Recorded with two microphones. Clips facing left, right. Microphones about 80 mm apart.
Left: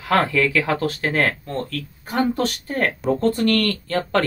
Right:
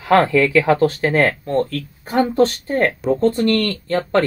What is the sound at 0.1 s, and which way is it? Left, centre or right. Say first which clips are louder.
Speech: right 5 dB; centre.